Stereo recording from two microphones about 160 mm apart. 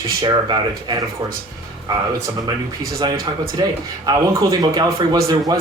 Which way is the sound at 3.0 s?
20° right (ahead or behind).